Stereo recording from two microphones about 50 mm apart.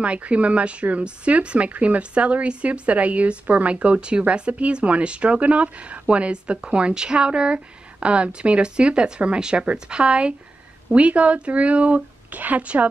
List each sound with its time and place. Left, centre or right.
0.0 s speech: right